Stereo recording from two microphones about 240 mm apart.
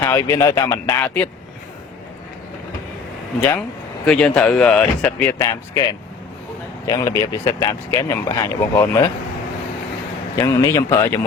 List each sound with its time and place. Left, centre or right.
0.0 s speech: centre
4.0 s speech: centre
6.8 s speech: centre
10.3 s speech: centre